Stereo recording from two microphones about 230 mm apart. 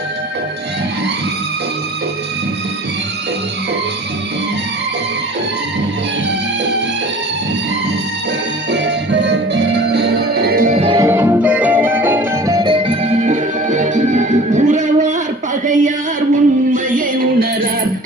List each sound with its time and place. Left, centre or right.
8.7 s music: right
11.0 s music: centre; by 15.1 s right
15.6 s a sound: right
16.7 s music: right